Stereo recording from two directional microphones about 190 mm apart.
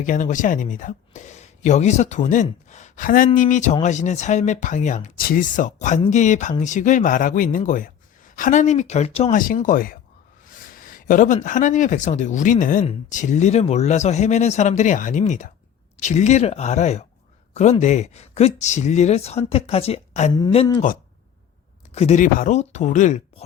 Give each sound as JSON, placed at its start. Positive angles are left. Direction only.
{"t": 0.0, "sound": "speech", "side_deg": 40}
{"t": 9.6, "sound": "speech", "side_deg": 45}
{"t": 10.4, "sound": "a sound", "side_deg": 45}
{"t": 11.4, "sound": "speech", "side_deg": 40}
{"t": 21.9, "sound": "speech", "side_deg": 35}